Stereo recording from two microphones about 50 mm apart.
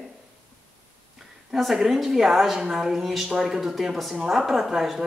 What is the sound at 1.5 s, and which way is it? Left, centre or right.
A woman's voice, centre.